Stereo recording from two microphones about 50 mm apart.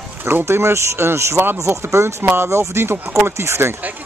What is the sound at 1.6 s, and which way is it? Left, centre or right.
Speech, right.